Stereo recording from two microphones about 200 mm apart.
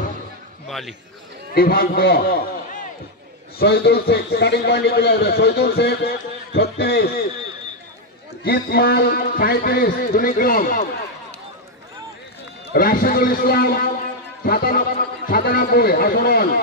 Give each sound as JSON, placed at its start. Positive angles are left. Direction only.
{"t": 0.7, "sound": "a man's voice", "side_deg": 0}
{"t": 1.5, "sound": "a man's voice", "side_deg": 50}
{"t": 3.5, "sound": "a man's voice", "side_deg": 55}
{"t": 8.5, "sound": "a man's voice", "side_deg": 50}
{"t": 12.7, "sound": "a man's voice", "side_deg": 45}